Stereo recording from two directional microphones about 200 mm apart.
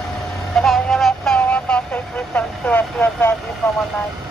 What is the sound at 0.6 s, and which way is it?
Vehicle, centre (ahead or behind).